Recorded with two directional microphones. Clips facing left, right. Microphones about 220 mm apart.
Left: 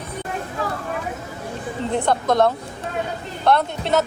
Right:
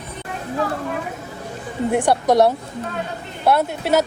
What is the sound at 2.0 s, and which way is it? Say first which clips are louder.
Speech: right 2 dB; 15° right (ahead or behind).